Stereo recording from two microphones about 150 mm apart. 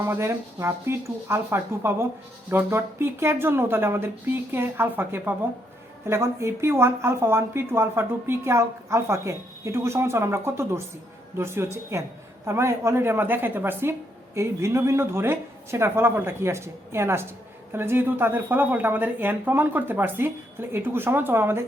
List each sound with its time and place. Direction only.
0.0 s a woman's voice: 15° right (ahead or behind)